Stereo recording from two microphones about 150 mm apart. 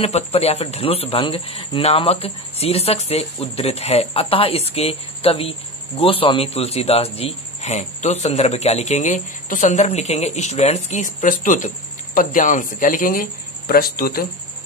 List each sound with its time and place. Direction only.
0.0 s a man's voice: 45° left (ahead or behind); by 14.2 s 90° left